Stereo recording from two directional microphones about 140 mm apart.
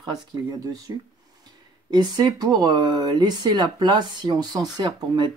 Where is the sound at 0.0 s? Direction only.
30° right (ahead or behind).